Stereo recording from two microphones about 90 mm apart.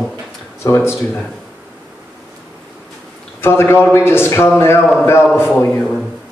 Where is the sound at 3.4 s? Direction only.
30° left (ahead or behind).